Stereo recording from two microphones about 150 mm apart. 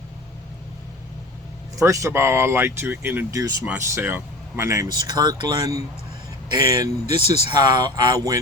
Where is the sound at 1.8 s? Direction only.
20° right (ahead or behind).